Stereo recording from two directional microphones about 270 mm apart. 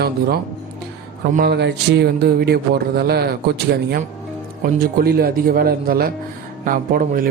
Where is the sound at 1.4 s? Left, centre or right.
Right.